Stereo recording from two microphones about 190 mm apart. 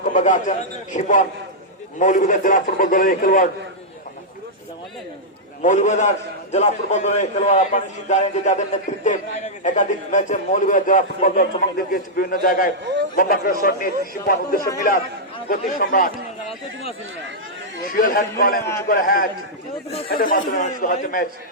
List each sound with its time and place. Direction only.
0.1 s a man's voice: 40° left (ahead or behind)
5.6 s a man's voice: 40° left (ahead or behind)
17.9 s a man's voice: 50° left (ahead or behind)